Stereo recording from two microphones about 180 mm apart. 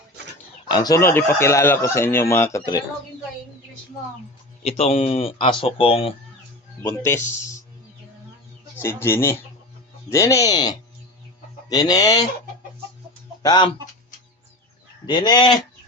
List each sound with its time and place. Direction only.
0.7 s speech: 20° left (ahead or behind)
4.6 s speech: 35° left (ahead or behind)
6.8 s speech: 15° left (ahead or behind)
8.8 s speech: 15° left (ahead or behind)
13.4 s speech: 25° left (ahead or behind)
15.0 s speech: 25° left (ahead or behind)